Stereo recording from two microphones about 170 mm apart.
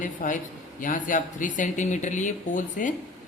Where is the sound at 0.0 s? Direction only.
50° left (ahead or behind).